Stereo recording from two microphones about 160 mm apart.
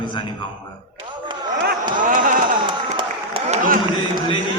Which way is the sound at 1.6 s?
60° right (ahead or behind).